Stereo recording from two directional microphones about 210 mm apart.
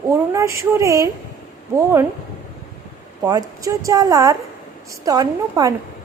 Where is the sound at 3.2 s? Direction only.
15° right (ahead or behind).